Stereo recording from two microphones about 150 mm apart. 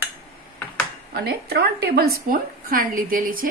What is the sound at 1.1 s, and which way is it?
A woman's voice, 90° right.